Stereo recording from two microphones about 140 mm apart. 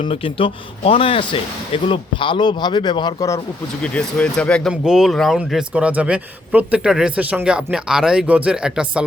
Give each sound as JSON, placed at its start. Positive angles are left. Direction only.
{"t": 0.0, "sound": "speech", "side_deg": 40}
{"t": 3.9, "sound": "speech", "side_deg": 5}
{"t": 4.7, "sound": "speech", "side_deg": -5}